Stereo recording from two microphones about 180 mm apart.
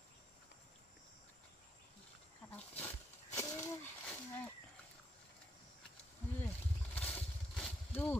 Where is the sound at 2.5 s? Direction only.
10° left (ahead or behind).